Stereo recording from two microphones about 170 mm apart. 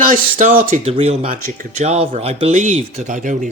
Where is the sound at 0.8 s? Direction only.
35° right (ahead or behind).